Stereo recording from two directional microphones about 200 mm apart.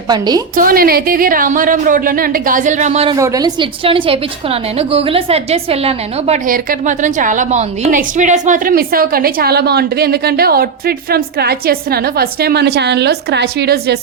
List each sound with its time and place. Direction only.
0.1 s a woman's voice: 20° right (ahead or behind)
0.5 s a woman's voice: 45° right (ahead or behind)
3.2 s a woman's voice: 15° right (ahead or behind); by 14.0 s 55° right (ahead or behind)